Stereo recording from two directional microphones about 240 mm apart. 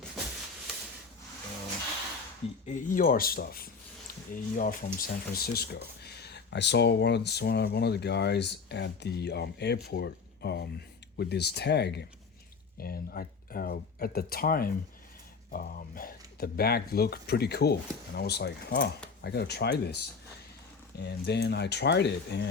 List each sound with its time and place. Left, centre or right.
2.6 s speech: left
21.0 s speech: left